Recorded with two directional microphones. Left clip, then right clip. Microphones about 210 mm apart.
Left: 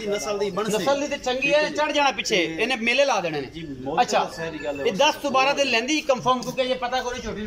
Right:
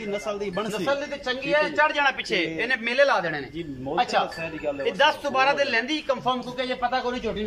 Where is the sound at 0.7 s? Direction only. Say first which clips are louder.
Left 4 dB; 15° left (ahead or behind).